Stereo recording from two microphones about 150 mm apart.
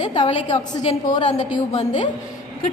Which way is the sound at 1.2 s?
50° left (ahead or behind).